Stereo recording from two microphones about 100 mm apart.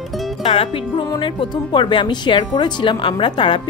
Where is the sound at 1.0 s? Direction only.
50° left (ahead or behind).